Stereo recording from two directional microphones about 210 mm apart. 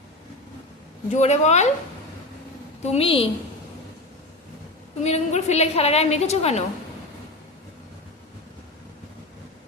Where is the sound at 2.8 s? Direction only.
30° left (ahead or behind).